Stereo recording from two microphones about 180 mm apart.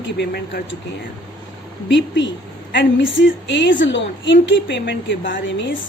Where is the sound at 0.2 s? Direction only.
70° left (ahead or behind).